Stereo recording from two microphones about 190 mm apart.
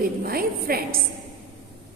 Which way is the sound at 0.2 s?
50° right (ahead or behind).